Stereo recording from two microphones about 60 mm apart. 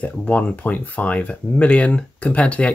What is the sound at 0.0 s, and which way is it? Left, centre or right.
Speech, left.